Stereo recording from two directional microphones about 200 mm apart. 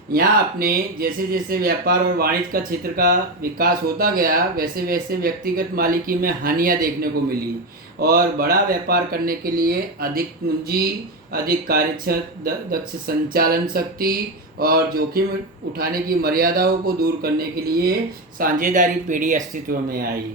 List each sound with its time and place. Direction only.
0.1 s speech: 45° right (ahead or behind)
11.3 s speech: 45° right (ahead or behind)